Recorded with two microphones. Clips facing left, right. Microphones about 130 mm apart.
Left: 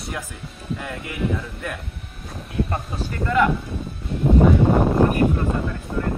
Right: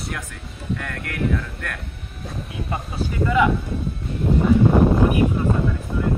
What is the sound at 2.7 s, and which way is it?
Speech, 5° right (ahead or behind).